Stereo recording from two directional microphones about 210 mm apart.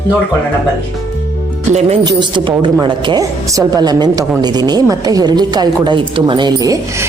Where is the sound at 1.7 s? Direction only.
30° right (ahead or behind).